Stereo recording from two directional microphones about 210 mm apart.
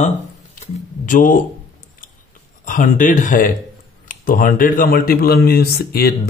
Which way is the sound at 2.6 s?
40° left (ahead or behind).